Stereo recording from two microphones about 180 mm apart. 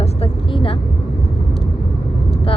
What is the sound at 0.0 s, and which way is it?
Vehicle, 30° left (ahead or behind).